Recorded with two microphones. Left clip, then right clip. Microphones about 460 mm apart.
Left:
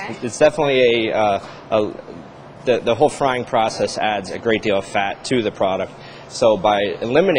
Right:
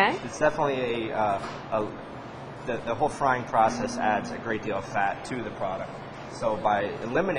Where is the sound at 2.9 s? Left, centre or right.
Left.